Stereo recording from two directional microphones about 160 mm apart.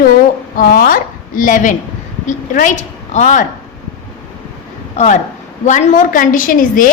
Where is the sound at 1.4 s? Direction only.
55° left (ahead or behind).